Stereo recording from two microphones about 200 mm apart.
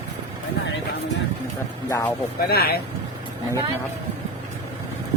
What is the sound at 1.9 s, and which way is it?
Speech, 15° left (ahead or behind).